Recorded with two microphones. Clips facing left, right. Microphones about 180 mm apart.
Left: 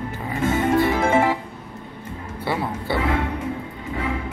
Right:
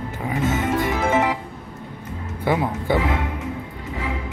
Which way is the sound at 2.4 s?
15° right (ahead or behind).